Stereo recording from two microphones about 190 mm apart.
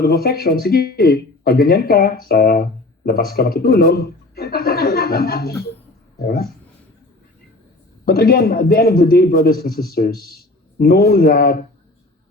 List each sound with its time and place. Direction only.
0.0 s speech: 55° left (ahead or behind)
8.0 s speech: 50° left (ahead or behind)